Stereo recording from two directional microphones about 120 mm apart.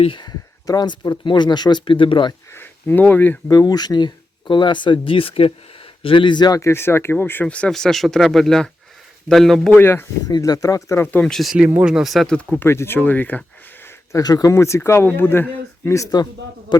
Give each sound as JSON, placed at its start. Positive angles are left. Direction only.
{"t": 0.0, "sound": "speech", "side_deg": 40}
{"t": 2.5, "sound": "speech", "side_deg": 15}
{"t": 3.5, "sound": "speech", "side_deg": 30}
{"t": 6.6, "sound": "speech", "side_deg": 20}
{"t": 9.7, "sound": "speech", "side_deg": 20}
{"t": 10.2, "sound": "speech", "side_deg": 30}
{"t": 11.0, "sound": "speech", "side_deg": 10}
{"t": 11.5, "sound": "speech", "side_deg": -10}
{"t": 12.6, "sound": "speech", "side_deg": 20}
{"t": 13.8, "sound": "speech", "side_deg": 30}